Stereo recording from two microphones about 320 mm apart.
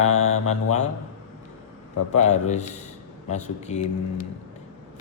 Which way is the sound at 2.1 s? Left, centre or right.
Left.